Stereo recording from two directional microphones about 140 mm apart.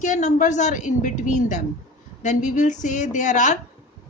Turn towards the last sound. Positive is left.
turn(degrees=60)  # may be behind; listen again after turning